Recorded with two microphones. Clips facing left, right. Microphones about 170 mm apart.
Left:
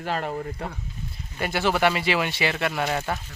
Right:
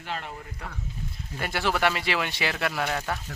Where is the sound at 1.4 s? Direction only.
Centre (ahead or behind).